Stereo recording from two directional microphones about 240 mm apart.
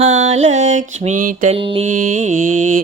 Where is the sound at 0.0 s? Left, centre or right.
Right.